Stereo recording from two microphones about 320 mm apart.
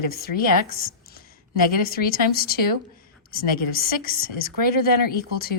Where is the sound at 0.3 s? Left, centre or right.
Left.